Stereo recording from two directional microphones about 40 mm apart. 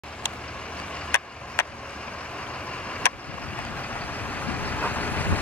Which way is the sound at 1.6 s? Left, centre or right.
Left.